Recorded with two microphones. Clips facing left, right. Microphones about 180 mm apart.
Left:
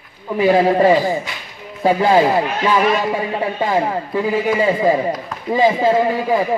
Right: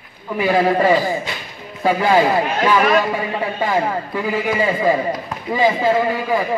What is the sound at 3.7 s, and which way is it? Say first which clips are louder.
A man's voice: left 1 dB; 25° left (ahead or behind).